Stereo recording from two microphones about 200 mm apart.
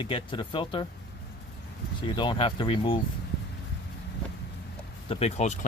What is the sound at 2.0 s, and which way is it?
Speech, 25° left (ahead or behind).